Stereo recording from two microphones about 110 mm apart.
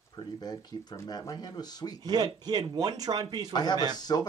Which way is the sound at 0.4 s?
35° left (ahead or behind).